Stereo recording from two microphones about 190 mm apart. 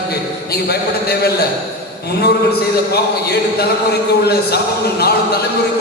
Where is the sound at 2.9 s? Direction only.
55° left (ahead or behind).